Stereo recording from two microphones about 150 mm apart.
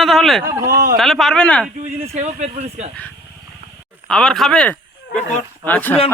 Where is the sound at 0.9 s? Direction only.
Centre (ahead or behind).